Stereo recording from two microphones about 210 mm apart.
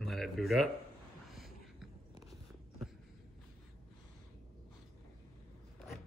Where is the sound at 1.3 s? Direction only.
Centre (ahead or behind).